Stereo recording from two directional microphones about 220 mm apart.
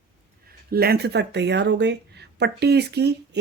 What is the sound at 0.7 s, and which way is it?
Speech, 45° right (ahead or behind).